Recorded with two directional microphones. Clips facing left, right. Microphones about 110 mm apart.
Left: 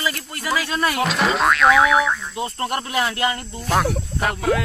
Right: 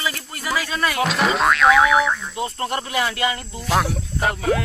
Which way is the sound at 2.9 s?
30° left (ahead or behind).